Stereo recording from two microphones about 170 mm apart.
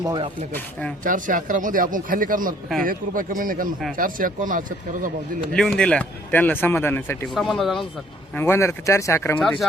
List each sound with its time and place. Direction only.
0.0 s speech: 25° right (ahead or behind)
0.5 s speech: 5° left (ahead or behind)
1.0 s speech: 50° right (ahead or behind)
5.5 s speech: 5° left (ahead or behind)
7.3 s speech: centre (ahead or behind)
8.4 s speech: 15° left (ahead or behind)
9.4 s speech: centre (ahead or behind)